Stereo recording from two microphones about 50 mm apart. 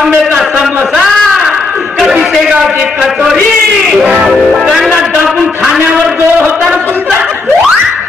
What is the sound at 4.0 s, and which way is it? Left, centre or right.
Speech, right.